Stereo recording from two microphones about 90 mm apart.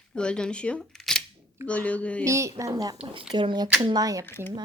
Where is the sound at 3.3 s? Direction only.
55° right (ahead or behind).